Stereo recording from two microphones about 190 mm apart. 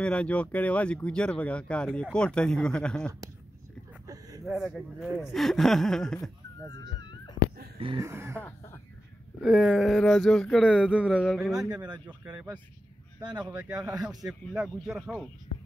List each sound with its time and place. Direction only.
0.0 s speech: 5° left (ahead or behind)
4.5 s speech: centre (ahead or behind)
6.6 s dog: 20° left (ahead or behind)
8.0 s speech: 15° right (ahead or behind)
8.4 s speech: 10° left (ahead or behind)
9.4 s speech: centre (ahead or behind)
11.6 s speech: 20° right (ahead or behind)
12.1 s speech: 5° right (ahead or behind)